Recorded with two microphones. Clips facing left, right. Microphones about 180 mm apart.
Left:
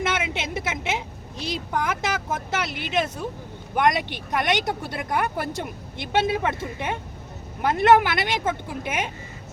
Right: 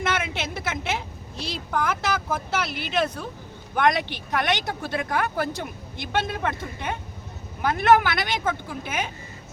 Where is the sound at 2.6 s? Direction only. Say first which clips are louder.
Even; 20° left (ahead or behind).